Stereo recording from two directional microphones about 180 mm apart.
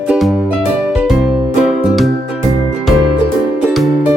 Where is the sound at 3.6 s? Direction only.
Centre (ahead or behind).